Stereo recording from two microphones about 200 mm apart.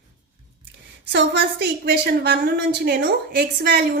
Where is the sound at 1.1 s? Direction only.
60° right (ahead or behind).